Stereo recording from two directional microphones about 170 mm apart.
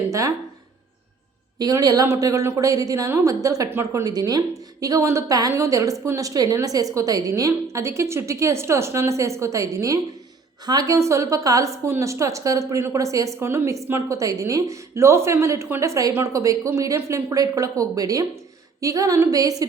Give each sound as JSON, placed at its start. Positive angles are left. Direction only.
{"t": 0.1, "sound": "a woman's voice", "side_deg": -20}
{"t": 1.5, "sound": "a woman's voice", "side_deg": -20}